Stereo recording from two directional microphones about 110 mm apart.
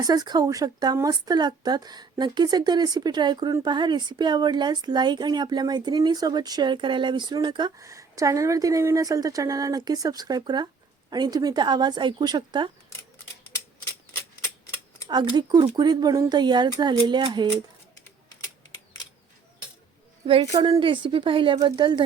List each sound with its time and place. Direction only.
0.0 s a woman's voice: 35° right (ahead or behind)
7.8 s a woman's voice: 30° right (ahead or behind); by 12.7 s 45° right (ahead or behind)
15.0 s a woman's voice: 40° right (ahead or behind)
17.9 s typing: 20° left (ahead or behind)
20.6 s speech: 50° right (ahead or behind)